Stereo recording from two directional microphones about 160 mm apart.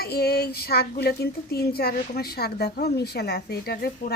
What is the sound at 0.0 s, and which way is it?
Speech, 75° left (ahead or behind).